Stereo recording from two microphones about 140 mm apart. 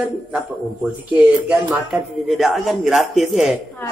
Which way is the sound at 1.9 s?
Centre (ahead or behind).